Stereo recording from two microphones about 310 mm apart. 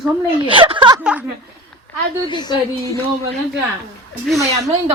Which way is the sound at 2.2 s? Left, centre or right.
Centre.